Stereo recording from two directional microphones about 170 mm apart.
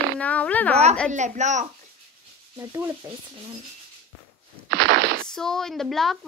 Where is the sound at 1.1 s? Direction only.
45° right (ahead or behind).